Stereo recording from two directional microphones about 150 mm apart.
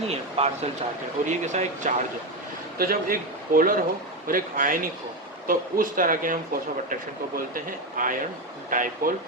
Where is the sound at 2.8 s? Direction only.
75° right (ahead or behind).